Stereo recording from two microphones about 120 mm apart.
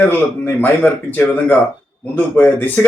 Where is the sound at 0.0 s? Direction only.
15° left (ahead or behind).